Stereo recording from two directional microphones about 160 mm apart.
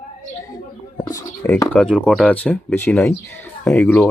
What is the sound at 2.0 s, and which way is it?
Speech, 5° left (ahead or behind).